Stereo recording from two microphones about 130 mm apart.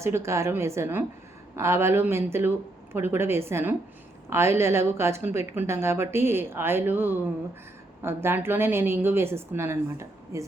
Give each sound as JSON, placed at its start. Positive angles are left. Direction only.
{"t": 0.0, "sound": "a woman's voice", "side_deg": -20}